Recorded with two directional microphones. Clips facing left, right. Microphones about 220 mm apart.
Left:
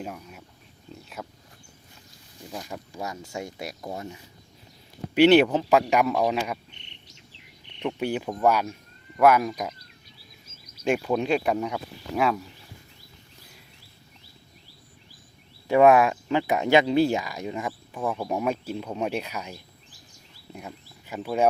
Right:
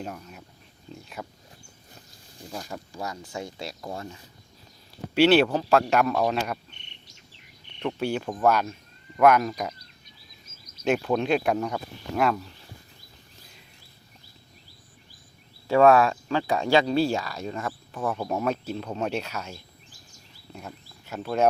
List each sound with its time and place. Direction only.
0.0 s speech: 5° left (ahead or behind)
2.5 s speech: 10° left (ahead or behind)
7.8 s speech: 15° left (ahead or behind)
10.8 s speech: 5° left (ahead or behind)
15.6 s speech: 15° left (ahead or behind)
21.1 s speech: 10° left (ahead or behind)